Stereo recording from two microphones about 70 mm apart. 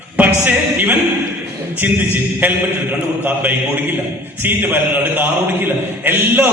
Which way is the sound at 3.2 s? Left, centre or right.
Right.